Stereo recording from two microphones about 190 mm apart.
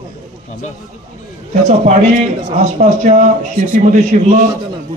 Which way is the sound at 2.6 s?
40° right (ahead or behind).